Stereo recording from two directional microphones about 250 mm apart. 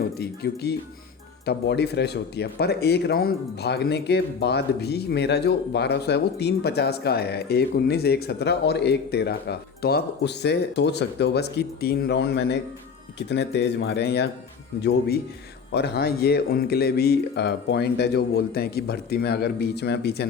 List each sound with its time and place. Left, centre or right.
0.2 s speech: left